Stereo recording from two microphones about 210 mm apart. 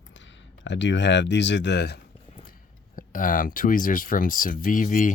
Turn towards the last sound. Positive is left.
turn(degrees=40)  # may be behind; listen again after turning